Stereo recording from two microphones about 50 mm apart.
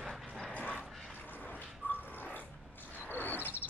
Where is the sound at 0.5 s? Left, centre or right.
Left.